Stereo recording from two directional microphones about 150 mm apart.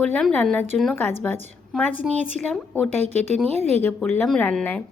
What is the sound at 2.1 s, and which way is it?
A woman's voice, 50° right (ahead or behind).